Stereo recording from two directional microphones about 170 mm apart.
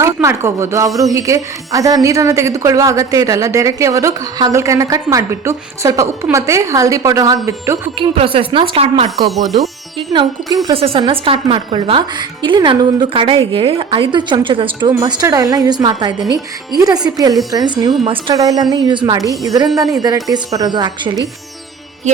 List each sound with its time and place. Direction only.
0.0 s a woman's voice: 15° right (ahead or behind)
7.9 s a woman's voice: 35° right (ahead or behind)
10.1 s a woman's voice: 25° right (ahead or behind)
10.7 s a woman's voice: 35° right (ahead or behind)